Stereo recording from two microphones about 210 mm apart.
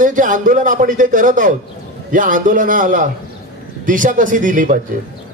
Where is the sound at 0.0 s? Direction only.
40° right (ahead or behind).